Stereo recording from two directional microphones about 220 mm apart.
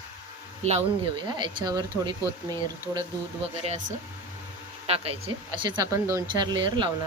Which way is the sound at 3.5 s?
30° right (ahead or behind).